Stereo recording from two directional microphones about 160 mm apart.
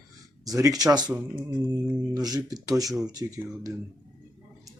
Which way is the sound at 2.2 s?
25° right (ahead or behind).